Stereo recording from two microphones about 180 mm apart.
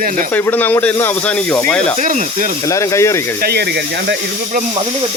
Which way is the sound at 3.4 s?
65° right (ahead or behind).